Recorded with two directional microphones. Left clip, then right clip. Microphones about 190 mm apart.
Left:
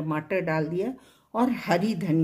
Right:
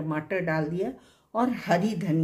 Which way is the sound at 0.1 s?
40° left (ahead or behind).